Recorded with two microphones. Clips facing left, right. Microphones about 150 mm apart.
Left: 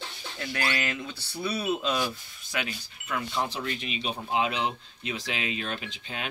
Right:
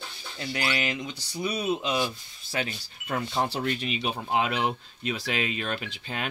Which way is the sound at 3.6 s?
55° right (ahead or behind).